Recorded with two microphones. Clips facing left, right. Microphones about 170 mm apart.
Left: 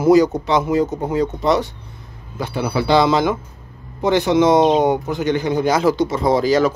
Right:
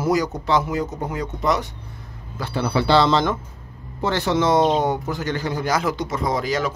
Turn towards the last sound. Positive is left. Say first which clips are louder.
# left 7 dB
turn(degrees=35)  # may be behind; listen again after turning